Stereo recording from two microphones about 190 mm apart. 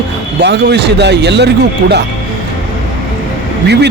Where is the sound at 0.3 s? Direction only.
65° right (ahead or behind).